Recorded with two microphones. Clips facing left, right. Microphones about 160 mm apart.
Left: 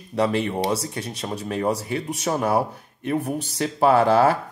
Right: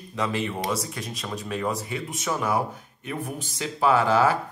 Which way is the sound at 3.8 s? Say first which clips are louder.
Left 4 dB; 55° left (ahead or behind).